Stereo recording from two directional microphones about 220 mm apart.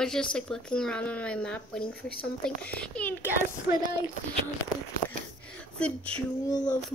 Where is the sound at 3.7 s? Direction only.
15° right (ahead or behind).